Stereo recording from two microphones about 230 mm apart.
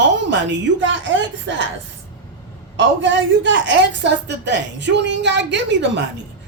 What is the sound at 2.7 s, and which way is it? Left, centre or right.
A woman's voice, right.